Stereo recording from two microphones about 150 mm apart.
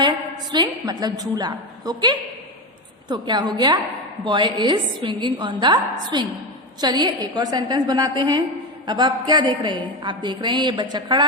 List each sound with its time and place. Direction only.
0.5 s a woman's voice: 30° right (ahead or behind)